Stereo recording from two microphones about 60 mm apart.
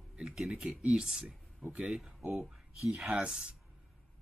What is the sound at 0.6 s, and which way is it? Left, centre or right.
Speech, centre.